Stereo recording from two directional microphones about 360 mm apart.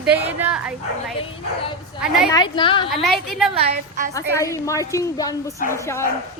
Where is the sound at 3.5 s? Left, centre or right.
Centre.